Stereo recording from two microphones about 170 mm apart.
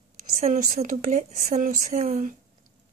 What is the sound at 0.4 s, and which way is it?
Speech, 45° right (ahead or behind).